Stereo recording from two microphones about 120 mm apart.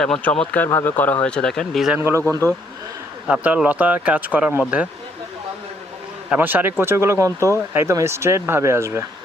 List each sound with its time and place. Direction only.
0.0 s speech: 10° left (ahead or behind)
2.0 s speech: 20° right (ahead or behind)
3.2 s speech: 10° right (ahead or behind)
6.3 s speech: 15° right (ahead or behind)